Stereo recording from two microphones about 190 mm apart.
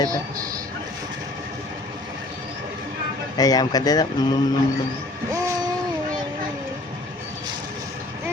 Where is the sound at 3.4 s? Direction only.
20° left (ahead or behind).